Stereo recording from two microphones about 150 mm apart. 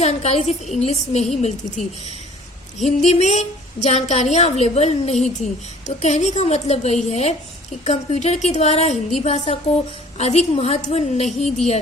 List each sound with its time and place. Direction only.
0.0 s a woman's voice: 45° left (ahead or behind)
2.7 s a woman's voice: 50° left (ahead or behind)